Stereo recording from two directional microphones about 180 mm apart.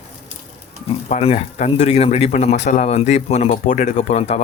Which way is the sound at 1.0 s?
40° left (ahead or behind).